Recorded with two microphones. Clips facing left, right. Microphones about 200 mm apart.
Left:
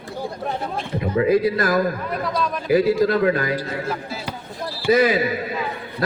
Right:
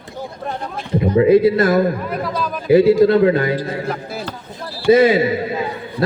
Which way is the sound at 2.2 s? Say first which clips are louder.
Right 1 dB; 5° right (ahead or behind).